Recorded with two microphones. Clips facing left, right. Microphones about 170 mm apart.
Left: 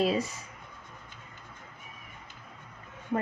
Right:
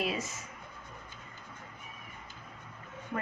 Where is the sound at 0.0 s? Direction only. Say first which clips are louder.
Left 7 dB; 35° left (ahead or behind).